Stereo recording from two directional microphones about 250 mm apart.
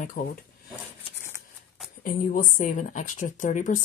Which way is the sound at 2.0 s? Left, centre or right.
Left.